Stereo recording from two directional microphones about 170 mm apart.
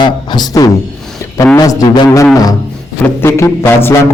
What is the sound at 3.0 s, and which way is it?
Music, 15° left (ahead or behind).